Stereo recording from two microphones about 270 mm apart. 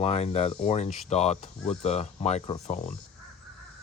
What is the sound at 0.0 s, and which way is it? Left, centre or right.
Speech, left.